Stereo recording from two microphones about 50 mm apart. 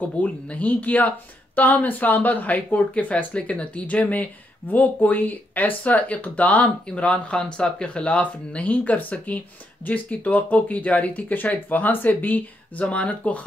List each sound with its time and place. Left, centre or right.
0.2 s speech: left
12.8 s speech: left